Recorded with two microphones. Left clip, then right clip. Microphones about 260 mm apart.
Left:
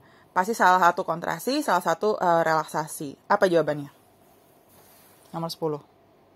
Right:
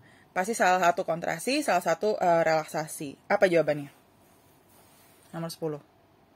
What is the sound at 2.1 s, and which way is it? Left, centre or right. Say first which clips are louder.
Speech: left 1 dB; left.